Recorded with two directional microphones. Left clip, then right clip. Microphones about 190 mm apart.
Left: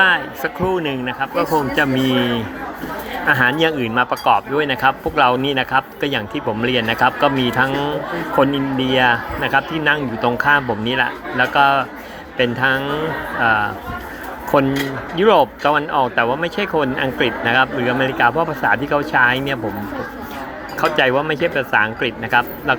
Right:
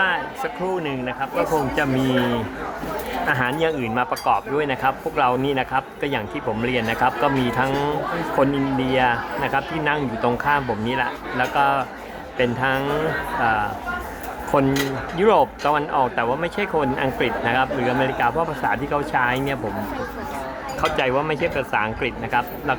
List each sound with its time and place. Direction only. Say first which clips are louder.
0.0 s a man's voice: left 6 dB; 20° left (ahead or behind)
20.8 s speech: left 5 dB; 10° left (ahead or behind)